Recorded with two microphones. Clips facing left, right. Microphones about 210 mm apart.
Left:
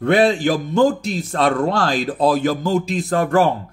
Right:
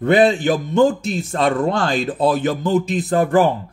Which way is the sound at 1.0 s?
Centre (ahead or behind).